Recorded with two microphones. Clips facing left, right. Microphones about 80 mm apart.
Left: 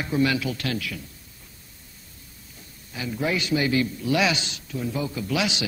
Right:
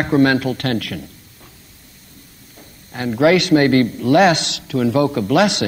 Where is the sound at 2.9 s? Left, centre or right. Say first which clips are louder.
Right 12 dB; right.